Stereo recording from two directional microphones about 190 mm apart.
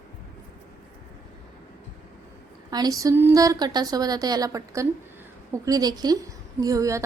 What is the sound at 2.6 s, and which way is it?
A woman's voice, 20° right (ahead or behind).